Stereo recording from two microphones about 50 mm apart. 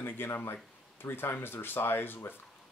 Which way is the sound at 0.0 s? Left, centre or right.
Left.